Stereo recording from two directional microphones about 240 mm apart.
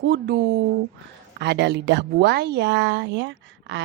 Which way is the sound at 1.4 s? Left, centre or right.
Right.